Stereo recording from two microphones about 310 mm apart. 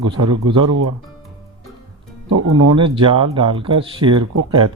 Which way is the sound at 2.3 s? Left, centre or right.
Right.